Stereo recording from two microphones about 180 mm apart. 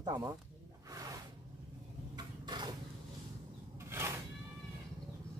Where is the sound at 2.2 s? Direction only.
25° right (ahead or behind).